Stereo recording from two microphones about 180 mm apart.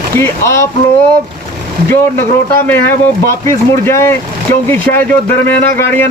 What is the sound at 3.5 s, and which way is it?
Speech, 15° left (ahead or behind).